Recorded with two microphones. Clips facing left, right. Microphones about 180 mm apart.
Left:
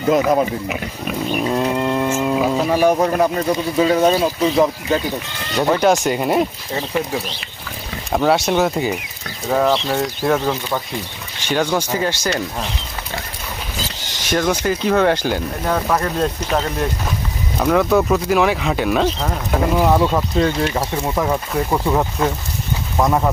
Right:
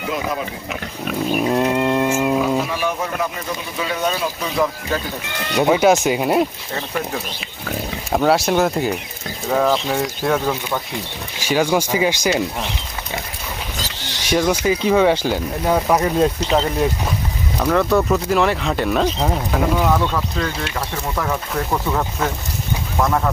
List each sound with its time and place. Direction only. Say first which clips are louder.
0.1 s speech: left 10 dB; 45° left (ahead or behind)
0.7 s cat: left 1 dB; centre (ahead or behind)
2.6 s speech: left 8 dB; 45° left (ahead or behind); by 4.9 s 25° left (ahead or behind)
5.5 s cat: right 1 dB; 5° right (ahead or behind)
8.1 s cat: even; centre (ahead or behind)
11.3 s speech: right 1 dB; 10° right (ahead or behind)
14.3 s speech: right 1 dB; 5° right (ahead or behind)
16.5 s cat: right 2 dB; 5° right (ahead or behind)
20.0 s speech: left 5 dB; 35° left (ahead or behind)
21.2 s speech: left 3 dB; 20° left (ahead or behind)